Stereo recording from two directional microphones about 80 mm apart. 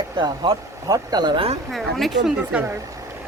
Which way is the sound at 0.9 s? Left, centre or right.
Right.